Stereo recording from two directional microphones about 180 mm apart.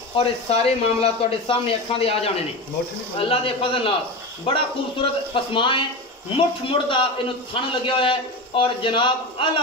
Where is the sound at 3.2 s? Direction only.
30° left (ahead or behind).